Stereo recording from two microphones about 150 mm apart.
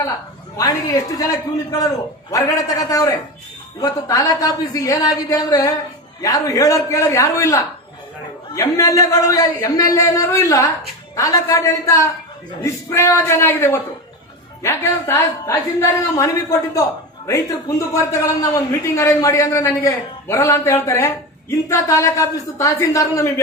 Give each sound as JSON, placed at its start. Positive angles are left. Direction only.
{"t": 0.5, "sound": "a man's voice", "side_deg": 25}